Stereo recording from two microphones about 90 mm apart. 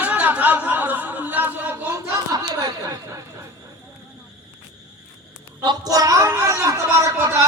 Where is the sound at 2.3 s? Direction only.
45° right (ahead or behind).